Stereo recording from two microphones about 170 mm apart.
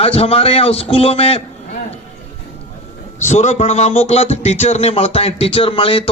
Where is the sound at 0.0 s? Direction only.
35° left (ahead or behind).